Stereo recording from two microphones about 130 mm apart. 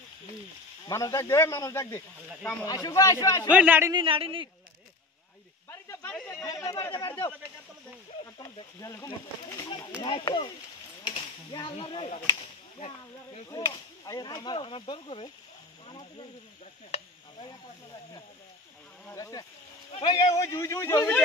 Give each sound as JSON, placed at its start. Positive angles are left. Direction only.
{"t": 0.8, "sound": "speech", "side_deg": 25}
{"t": 3.4, "sound": "a man's voice", "side_deg": -10}
{"t": 3.9, "sound": "speech", "side_deg": -40}
{"t": 5.7, "sound": "snake", "side_deg": 20}
{"t": 6.1, "sound": "chatter", "side_deg": 15}
{"t": 6.4, "sound": "speech", "side_deg": 30}
{"t": 8.7, "sound": "speech", "side_deg": 25}
{"t": 10.0, "sound": "speech", "side_deg": 35}
{"t": 12.4, "sound": "speech", "side_deg": 55}
{"t": 13.5, "sound": "speech", "side_deg": 30}
{"t": 19.1, "sound": "speech", "side_deg": 25}
{"t": 20.0, "sound": "speech", "side_deg": 35}
{"t": 20.3, "sound": "speech", "side_deg": 25}